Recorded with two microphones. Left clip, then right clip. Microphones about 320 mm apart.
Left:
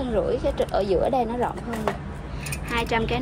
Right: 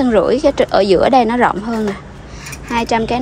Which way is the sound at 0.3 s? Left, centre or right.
Right.